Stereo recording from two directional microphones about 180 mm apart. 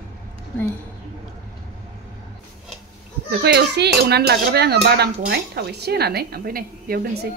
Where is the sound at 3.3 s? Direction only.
70° right (ahead or behind).